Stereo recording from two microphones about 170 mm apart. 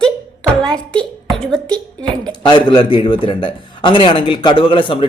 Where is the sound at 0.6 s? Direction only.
5° left (ahead or behind).